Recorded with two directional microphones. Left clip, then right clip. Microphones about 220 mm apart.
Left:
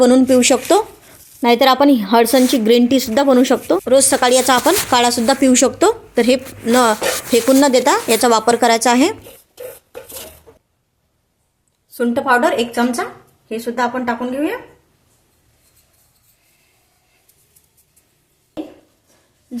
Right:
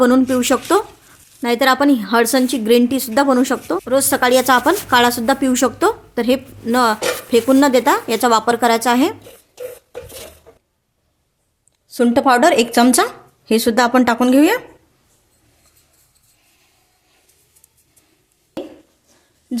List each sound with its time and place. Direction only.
0.0 s a woman's voice: centre (ahead or behind)
11.9 s speech: 25° right (ahead or behind)
13.5 s speech: 50° right (ahead or behind)